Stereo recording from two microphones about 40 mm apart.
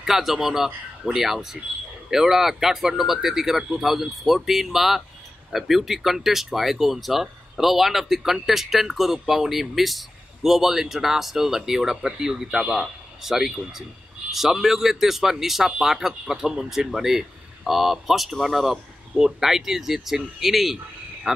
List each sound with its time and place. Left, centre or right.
0.0 s speech: centre
12.5 s a man's voice: right
13.2 s speech: centre